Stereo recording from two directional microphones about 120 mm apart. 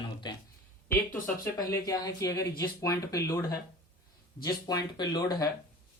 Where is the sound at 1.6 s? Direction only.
30° left (ahead or behind).